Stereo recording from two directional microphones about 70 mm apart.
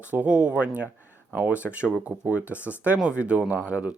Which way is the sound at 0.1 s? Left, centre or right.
Right.